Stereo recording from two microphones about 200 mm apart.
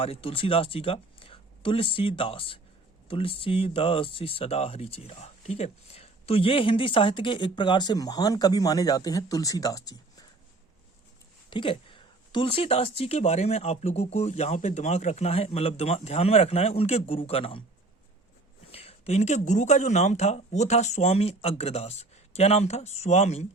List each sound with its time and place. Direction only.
0.0 s speech: 30° left (ahead or behind)
11.5 s speech: 25° left (ahead or behind)
18.7 s speech: 30° left (ahead or behind)